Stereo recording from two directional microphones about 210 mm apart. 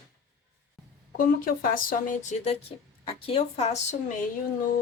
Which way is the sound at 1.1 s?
40° left (ahead or behind).